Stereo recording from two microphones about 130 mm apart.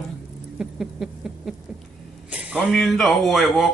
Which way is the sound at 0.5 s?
5° right (ahead or behind).